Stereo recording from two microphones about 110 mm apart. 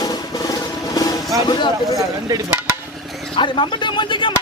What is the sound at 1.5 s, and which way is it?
Speech, 45° left (ahead or behind).